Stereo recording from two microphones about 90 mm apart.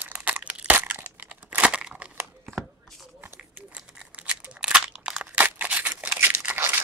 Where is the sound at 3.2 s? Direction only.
20° right (ahead or behind).